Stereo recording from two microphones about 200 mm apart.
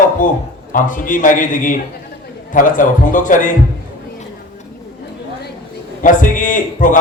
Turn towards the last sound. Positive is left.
turn(degrees=40)  # may be behind; listen again after turning